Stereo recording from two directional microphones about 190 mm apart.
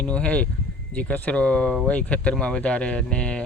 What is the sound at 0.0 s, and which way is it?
Speech, 5° left (ahead or behind).